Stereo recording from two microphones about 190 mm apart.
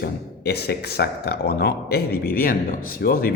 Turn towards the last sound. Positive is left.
turn(degrees=50)  # may be behind; listen again after turning